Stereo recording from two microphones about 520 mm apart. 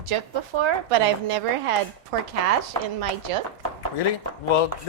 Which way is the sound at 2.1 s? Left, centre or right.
Right.